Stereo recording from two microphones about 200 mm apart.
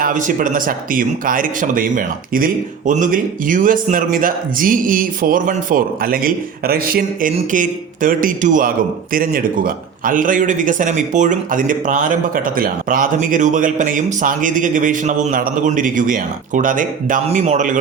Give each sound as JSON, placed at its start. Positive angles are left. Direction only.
{"t": 0.0, "sound": "a man's voice", "side_deg": -40}